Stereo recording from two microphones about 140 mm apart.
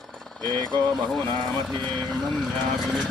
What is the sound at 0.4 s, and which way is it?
Speech, 30° right (ahead or behind).